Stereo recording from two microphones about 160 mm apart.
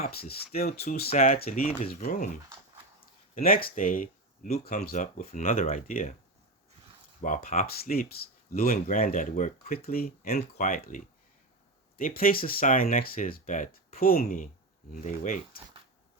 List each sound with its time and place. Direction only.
0.0 s speech: 75° left (ahead or behind)
1.1 s speech: 60° left (ahead or behind)
3.3 s speech: 65° left (ahead or behind)
7.2 s speech: 60° left (ahead or behind)
10.3 s speech: 55° left (ahead or behind)
15.0 s speech: 50° left (ahead or behind)